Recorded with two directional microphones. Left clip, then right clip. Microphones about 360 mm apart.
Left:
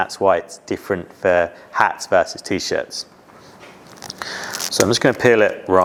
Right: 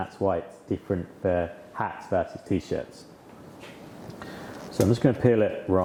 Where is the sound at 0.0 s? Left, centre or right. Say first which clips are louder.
Left 10 dB; centre.